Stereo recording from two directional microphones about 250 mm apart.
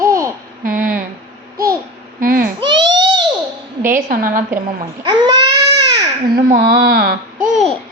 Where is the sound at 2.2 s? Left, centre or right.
Right.